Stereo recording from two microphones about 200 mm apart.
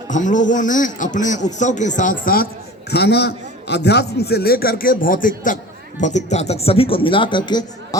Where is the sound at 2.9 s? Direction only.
55° left (ahead or behind).